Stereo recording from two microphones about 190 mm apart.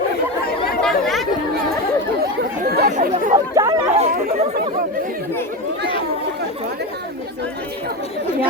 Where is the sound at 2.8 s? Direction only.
45° right (ahead or behind).